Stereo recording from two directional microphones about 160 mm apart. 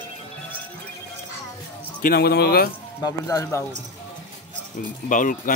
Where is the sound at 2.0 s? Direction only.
80° left.